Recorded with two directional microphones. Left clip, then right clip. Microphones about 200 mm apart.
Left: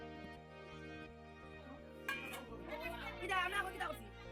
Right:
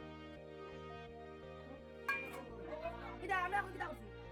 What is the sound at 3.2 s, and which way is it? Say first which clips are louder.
Music: right 1 dB; 45° right (ahead or behind).